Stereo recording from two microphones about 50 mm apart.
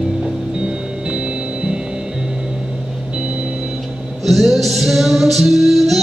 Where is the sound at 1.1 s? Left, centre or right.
Centre.